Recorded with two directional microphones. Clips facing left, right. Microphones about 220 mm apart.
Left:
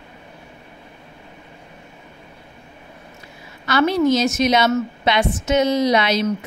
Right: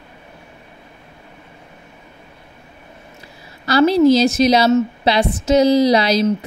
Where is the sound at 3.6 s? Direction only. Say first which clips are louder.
Right 5 dB; 35° right (ahead or behind).